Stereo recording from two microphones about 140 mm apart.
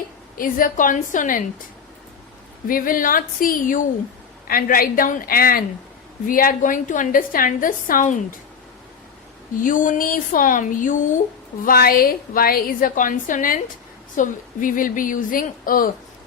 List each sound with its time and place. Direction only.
0.3 s a woman's voice: 80° left
2.6 s speech: 80° left
4.4 s a woman's voice: 90° left; by 8.4 s 65° left (ahead or behind)
9.6 s a woman's voice: 70° left (ahead or behind)
11.6 s a woman's voice: 90° left